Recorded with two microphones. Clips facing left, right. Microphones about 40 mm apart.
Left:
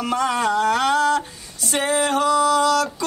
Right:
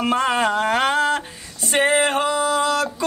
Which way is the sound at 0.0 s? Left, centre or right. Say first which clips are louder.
Right 2 dB; right.